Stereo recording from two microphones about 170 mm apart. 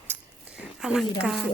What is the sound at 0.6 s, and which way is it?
Speech, 5° right (ahead or behind).